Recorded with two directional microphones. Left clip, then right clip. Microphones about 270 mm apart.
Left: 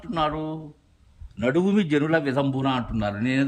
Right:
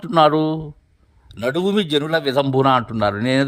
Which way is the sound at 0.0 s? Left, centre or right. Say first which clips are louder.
Right 11 dB; right.